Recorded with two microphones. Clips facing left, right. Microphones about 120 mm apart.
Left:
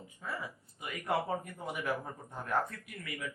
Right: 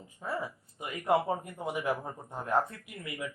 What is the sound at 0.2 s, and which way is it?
A man's voice, 25° right (ahead or behind).